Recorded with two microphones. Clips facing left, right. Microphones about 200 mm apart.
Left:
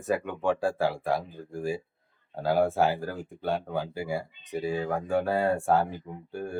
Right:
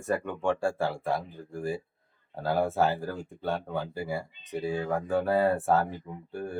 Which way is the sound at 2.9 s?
Centre (ahead or behind).